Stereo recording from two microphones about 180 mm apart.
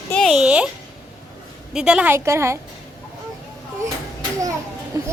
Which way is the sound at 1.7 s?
5° right (ahead or behind).